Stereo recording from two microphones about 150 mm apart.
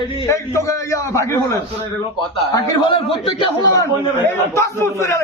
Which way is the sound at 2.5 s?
25° left (ahead or behind).